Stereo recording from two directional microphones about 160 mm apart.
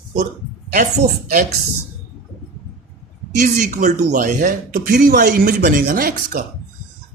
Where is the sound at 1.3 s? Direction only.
55° right (ahead or behind).